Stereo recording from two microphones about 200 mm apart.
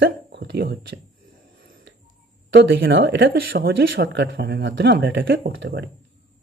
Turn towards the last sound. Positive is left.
turn(degrees=-55)  # may be behind; listen again after turning